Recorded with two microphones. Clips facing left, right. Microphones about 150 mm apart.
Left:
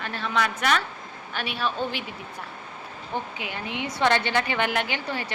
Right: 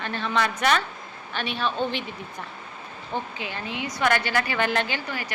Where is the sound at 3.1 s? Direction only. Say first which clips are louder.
Right 1 dB; 15° left (ahead or behind).